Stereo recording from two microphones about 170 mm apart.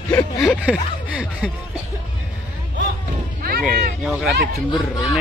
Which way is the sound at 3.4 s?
60° right (ahead or behind).